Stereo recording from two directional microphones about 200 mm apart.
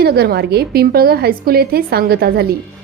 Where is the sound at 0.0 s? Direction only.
50° right (ahead or behind).